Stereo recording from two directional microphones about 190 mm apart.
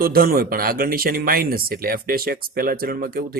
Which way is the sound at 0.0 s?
50° right (ahead or behind).